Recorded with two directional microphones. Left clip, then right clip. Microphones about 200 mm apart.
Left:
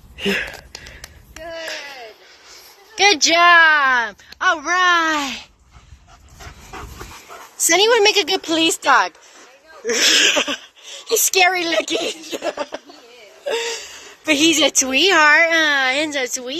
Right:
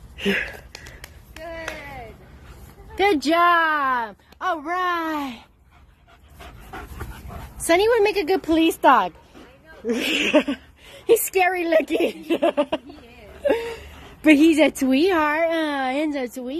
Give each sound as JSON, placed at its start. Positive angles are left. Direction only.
{"t": 0.2, "sound": "speech", "side_deg": 15}
{"t": 0.7, "sound": "a sound", "side_deg": 50}
{"t": 3.0, "sound": "a child's voice", "side_deg": -10}
{"t": 6.7, "sound": "dog", "side_deg": 0}
{"t": 7.6, "sound": "a woman's voice", "side_deg": 0}
{"t": 8.8, "sound": "a child's voice", "side_deg": -15}
{"t": 9.8, "sound": "a woman's voice", "side_deg": 0}